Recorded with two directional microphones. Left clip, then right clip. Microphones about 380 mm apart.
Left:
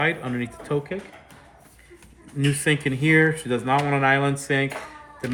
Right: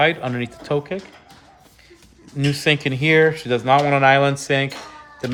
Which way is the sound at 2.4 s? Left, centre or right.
Right.